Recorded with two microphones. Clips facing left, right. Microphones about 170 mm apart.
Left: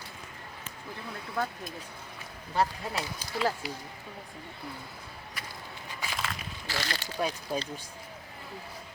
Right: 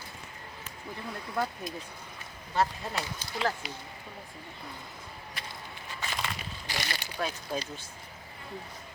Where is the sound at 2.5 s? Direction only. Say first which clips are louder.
Even; 10° left (ahead or behind).